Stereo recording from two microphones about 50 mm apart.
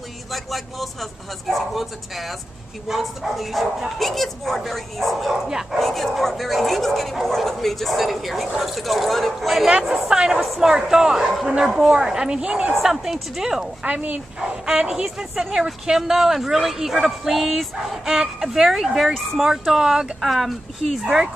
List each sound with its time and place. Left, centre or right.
0.3 s speech: centre
5.5 s speech: centre
5.8 s speech: centre
12.7 s speech: centre
13.8 s speech: right
20.2 s speech: centre